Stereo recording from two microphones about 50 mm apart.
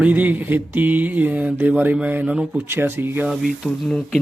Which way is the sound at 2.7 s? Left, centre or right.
Right.